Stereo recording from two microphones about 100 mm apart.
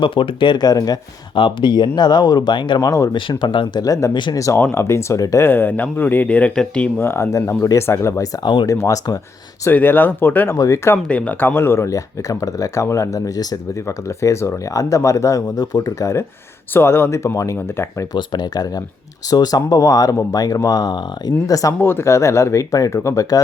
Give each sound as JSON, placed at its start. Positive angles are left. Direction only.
{"t": 0.0, "sound": "speech", "side_deg": 60}
{"t": 1.4, "sound": "speech", "side_deg": 55}
{"t": 2.8, "sound": "speech", "side_deg": 35}
{"t": 3.2, "sound": "speech", "side_deg": 55}
{"t": 3.8, "sound": "speech", "side_deg": 35}
{"t": 5.5, "sound": "speech", "side_deg": 20}
{"t": 7.0, "sound": "speech", "side_deg": 25}
{"t": 9.6, "sound": "speech", "side_deg": 20}
{"t": 18.1, "sound": "speech", "side_deg": 45}
{"t": 21.8, "sound": "speech", "side_deg": 25}